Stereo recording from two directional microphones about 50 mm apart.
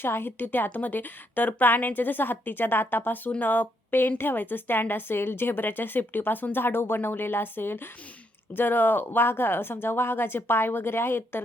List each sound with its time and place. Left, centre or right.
0.0 s a woman's voice: left